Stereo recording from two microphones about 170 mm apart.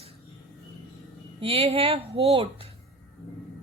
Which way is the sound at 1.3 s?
35° right (ahead or behind).